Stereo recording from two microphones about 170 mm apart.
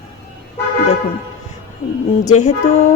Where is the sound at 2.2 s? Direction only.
45° left (ahead or behind).